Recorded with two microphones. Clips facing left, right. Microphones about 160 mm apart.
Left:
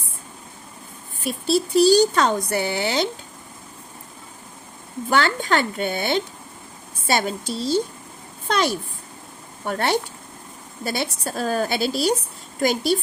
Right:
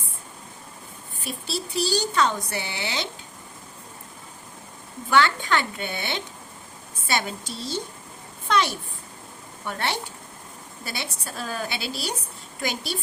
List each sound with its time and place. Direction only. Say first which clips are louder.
1.5 s speech: left 11 dB; 45° left (ahead or behind)
5.0 s a woman's voice: left 1 dB; 40° left (ahead or behind)
8.4 s a sound: left 2 dB; 40° left (ahead or behind)
9.6 s a woman's voice: left 7 dB; 45° left (ahead or behind)